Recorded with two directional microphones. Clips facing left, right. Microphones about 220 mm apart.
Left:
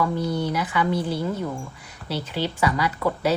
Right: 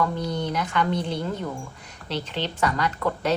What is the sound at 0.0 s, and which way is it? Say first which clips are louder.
Speech: left 2 dB; 5° left (ahead or behind).